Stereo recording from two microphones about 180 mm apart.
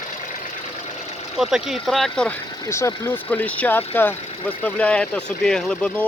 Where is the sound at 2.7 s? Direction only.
15° left (ahead or behind).